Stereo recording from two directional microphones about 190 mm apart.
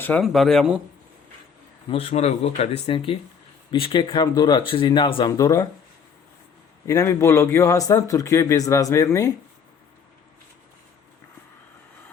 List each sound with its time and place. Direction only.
0.0 s speech: 5° left (ahead or behind)
1.9 s speech: 35° left (ahead or behind)
6.8 s a man's voice: 15° left (ahead or behind)